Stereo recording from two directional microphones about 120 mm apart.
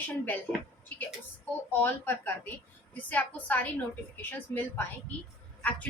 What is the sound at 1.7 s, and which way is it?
A woman's voice, 15° left (ahead or behind).